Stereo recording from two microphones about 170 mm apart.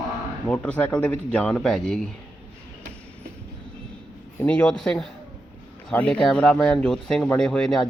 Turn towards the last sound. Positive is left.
turn(degrees=5)  # may be behind; listen again after turning